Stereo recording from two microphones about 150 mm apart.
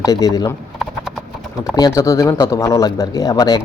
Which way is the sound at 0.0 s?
25° left (ahead or behind).